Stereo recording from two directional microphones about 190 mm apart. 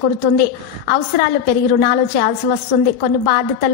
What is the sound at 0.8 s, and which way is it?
A woman's voice, 55° left (ahead or behind).